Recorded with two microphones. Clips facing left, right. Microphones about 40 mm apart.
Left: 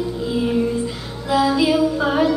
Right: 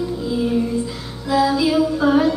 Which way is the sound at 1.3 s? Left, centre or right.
Left.